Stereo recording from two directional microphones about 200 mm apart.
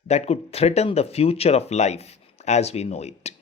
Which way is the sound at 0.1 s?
30° left (ahead or behind).